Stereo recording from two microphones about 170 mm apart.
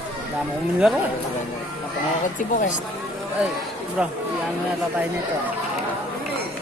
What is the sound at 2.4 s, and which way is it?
Speech, 50° left (ahead or behind).